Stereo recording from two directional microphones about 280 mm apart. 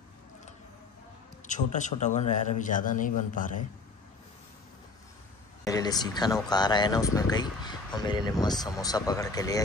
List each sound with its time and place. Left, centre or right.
1.5 s a man's voice: left
5.7 s speech: centre